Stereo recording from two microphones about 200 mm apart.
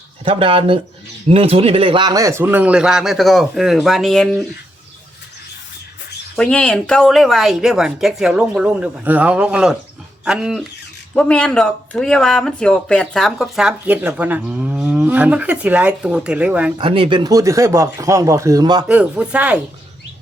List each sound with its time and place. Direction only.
0.3 s speech: 25° right (ahead or behind); by 4.4 s 5° left (ahead or behind)
6.3 s speech: 5° left (ahead or behind)
16.8 s speech: 25° right (ahead or behind)
18.9 s speech: 5° right (ahead or behind)